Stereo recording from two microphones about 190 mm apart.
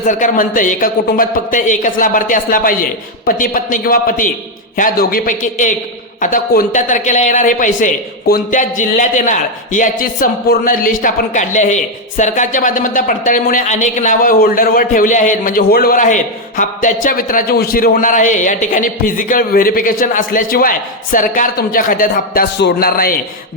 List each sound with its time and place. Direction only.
0.0 s a man's voice: 40° left (ahead or behind)